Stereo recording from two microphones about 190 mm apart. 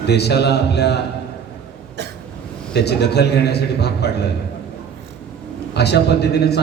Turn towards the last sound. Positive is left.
turn(degrees=60)  # may be behind; listen again after turning